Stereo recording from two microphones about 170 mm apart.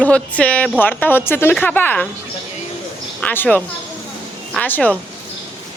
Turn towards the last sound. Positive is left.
turn(degrees=10)  # may be behind; listen again after turning